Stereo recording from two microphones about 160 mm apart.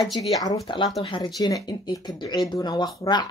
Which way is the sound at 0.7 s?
30° left (ahead or behind).